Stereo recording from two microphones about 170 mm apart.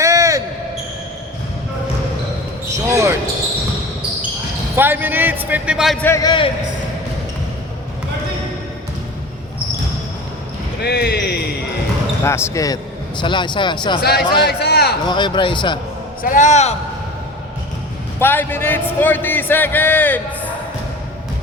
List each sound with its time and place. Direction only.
0.0 s basketball bounce: 20° right (ahead or behind)
2.7 s basketball bounce: 15° right (ahead or behind)
4.7 s a man's voice: 10° right (ahead or behind)
6.2 s a man's voice: 30° left (ahead or behind)
10.8 s speech: 70° left (ahead or behind)
12.2 s a man's voice: 15° left (ahead or behind)
14.0 s speech: 70° left (ahead or behind)
15.0 s a man's voice: 25° left (ahead or behind)
16.2 s speech: 50° left (ahead or behind)
18.2 s a man's voice: 10° left (ahead or behind)